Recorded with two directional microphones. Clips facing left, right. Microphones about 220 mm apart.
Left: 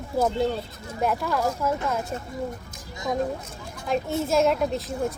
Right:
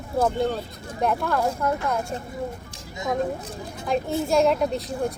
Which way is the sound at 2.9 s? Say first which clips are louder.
Right 1 dB; 20° right (ahead or behind).